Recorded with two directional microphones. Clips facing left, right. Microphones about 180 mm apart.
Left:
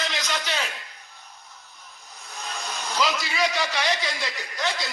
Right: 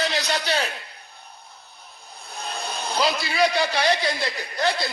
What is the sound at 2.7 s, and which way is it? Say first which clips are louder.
A man's voice: right 2 dB; 30° right (ahead or behind).